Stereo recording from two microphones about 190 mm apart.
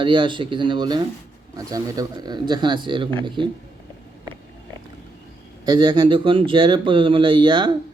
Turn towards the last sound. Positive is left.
turn(degrees=-25)  # may be behind; listen again after turning